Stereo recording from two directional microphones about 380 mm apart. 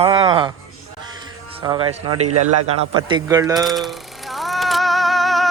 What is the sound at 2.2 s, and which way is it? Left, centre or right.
Speech, right.